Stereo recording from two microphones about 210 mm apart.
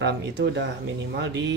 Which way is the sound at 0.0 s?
55° right (ahead or behind).